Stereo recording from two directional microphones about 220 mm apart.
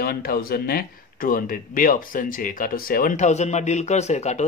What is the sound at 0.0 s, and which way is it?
Speech, 45° left (ahead or behind).